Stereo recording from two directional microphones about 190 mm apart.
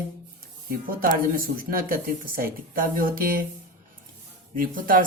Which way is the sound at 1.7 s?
50° right (ahead or behind).